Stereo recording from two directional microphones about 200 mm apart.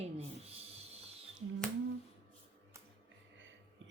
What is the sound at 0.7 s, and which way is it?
Music, 30° right (ahead or behind).